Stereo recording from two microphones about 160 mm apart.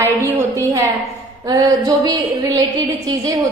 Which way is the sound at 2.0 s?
20° right (ahead or behind).